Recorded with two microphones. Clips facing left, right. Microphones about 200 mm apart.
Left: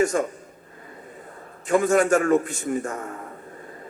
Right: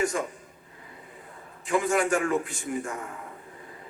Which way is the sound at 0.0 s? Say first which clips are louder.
Left 6 dB; 45° left (ahead or behind).